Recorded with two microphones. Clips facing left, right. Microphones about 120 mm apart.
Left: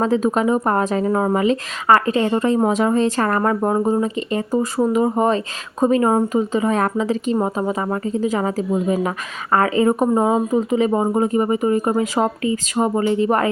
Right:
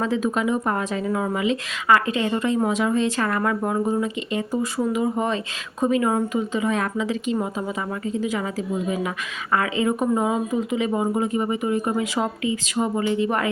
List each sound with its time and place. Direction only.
0.0 s speech: 40° left (ahead or behind)